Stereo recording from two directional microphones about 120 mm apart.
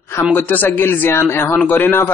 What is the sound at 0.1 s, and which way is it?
A man's voice, 20° left (ahead or behind).